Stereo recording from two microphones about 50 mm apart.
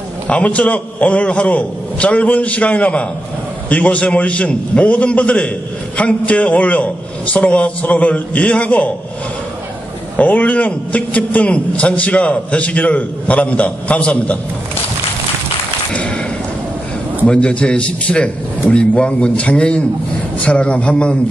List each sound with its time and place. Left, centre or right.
0.3 s a man's voice: left
10.1 s a man's voice: left
17.3 s a man's voice: left